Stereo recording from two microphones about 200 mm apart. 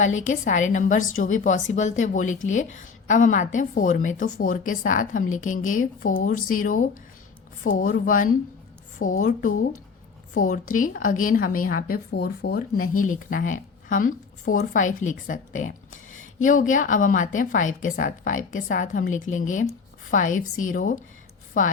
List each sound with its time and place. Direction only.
0.0 s a woman's voice: 35° left (ahead or behind)